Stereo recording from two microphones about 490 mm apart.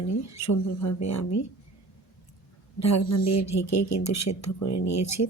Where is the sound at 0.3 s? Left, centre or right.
Left.